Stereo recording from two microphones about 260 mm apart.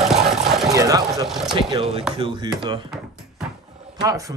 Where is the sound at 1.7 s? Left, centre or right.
Right.